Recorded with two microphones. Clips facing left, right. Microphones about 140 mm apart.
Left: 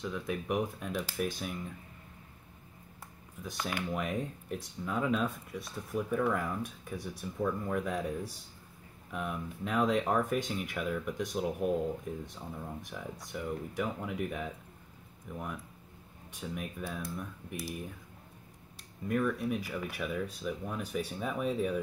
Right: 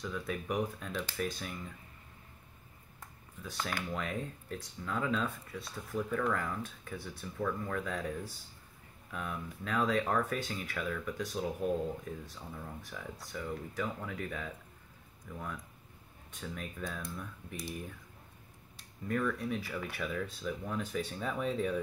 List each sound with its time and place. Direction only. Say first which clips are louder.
0.0 s speech: left 2 dB; 10° left (ahead or behind)
3.4 s speech: left 2 dB; 15° left (ahead or behind)
19.0 s speech: left 3 dB; 10° left (ahead or behind)